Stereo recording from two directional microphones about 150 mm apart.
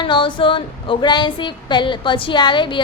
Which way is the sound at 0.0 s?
30° left (ahead or behind).